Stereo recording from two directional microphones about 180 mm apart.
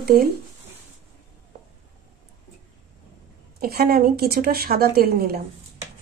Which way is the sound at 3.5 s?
55° right (ahead or behind).